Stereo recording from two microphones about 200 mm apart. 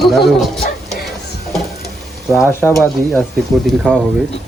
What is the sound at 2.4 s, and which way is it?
Speech, 10° left (ahead or behind).